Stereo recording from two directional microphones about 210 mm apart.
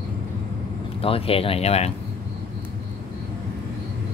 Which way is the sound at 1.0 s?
25° left (ahead or behind).